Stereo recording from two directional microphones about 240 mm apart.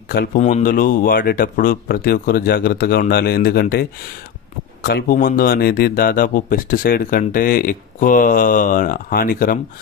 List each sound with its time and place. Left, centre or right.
0.1 s speech: left
4.8 s speech: left